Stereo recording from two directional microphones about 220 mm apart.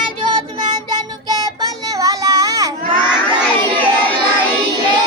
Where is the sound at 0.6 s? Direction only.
20° right (ahead or behind).